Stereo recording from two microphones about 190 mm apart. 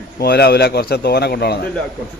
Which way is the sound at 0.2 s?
55° left (ahead or behind).